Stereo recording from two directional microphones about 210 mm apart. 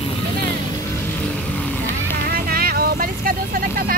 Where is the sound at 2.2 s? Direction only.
45° right (ahead or behind).